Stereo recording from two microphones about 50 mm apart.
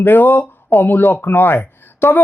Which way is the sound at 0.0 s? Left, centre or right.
Left.